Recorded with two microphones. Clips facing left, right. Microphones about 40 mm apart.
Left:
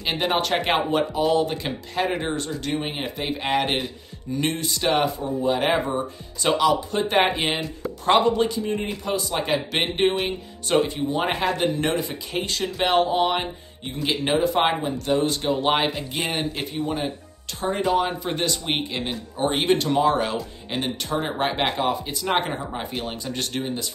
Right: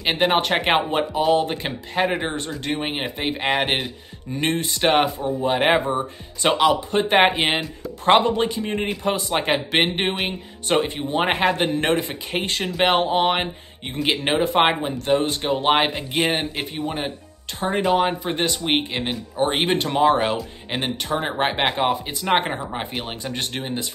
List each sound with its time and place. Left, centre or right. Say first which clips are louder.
0.0 s speech: right 4 dB; right